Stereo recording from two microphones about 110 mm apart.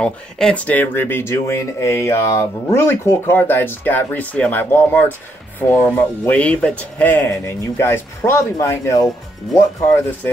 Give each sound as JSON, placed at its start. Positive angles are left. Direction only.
{"t": 0.0, "sound": "speech", "side_deg": 10}